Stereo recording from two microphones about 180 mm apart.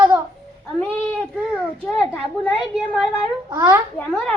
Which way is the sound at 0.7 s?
Centre (ahead or behind).